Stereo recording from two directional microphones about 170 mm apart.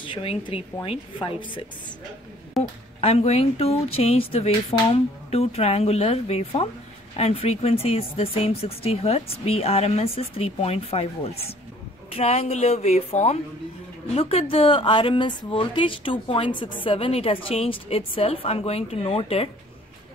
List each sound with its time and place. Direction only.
0.0 s a woman's voice: 30° left (ahead or behind)
2.6 s speech: centre (ahead or behind)
3.0 s speech: 35° left (ahead or behind)